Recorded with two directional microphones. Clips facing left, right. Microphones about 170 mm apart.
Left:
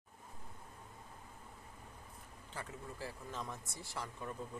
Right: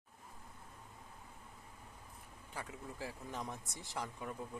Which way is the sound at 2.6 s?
15° right (ahead or behind).